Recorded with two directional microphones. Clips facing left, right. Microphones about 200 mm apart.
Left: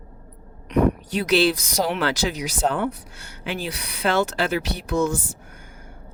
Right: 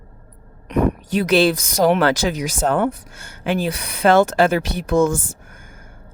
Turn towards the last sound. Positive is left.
turn(degrees=-50)  # may be behind; listen again after turning